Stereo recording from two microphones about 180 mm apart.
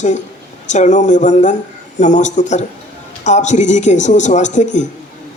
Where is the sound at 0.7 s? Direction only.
40° left (ahead or behind).